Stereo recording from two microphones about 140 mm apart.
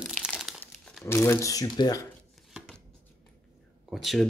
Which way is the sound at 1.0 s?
20° left (ahead or behind).